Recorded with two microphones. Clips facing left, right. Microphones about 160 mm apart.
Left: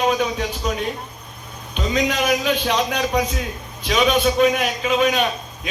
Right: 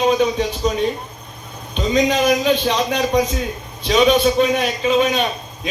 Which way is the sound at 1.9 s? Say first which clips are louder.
Right 4 dB; 35° right (ahead or behind).